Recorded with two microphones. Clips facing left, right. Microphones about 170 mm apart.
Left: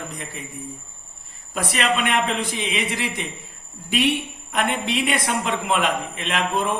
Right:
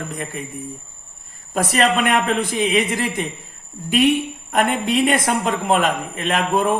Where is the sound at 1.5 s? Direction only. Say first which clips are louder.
Right 5 dB; 45° right (ahead or behind).